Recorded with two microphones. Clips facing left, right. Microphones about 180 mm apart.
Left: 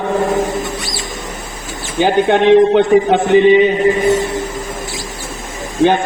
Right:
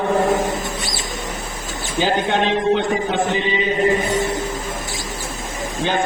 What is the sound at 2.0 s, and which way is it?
A man's voice, 60° left (ahead or behind).